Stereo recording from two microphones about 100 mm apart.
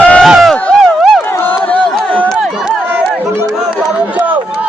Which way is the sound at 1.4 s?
15° left (ahead or behind).